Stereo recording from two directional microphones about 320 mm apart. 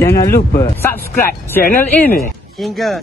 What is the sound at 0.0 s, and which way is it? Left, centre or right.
Speech, centre.